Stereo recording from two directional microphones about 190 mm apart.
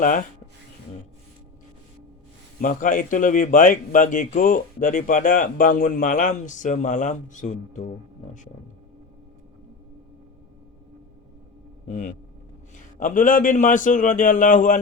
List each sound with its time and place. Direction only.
0.0 s speech: 45° left (ahead or behind)
2.6 s speech: 45° left (ahead or behind)
11.9 s speech: 40° left (ahead or behind)